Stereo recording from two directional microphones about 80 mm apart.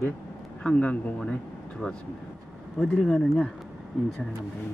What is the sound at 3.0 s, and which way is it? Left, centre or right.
Speech, centre.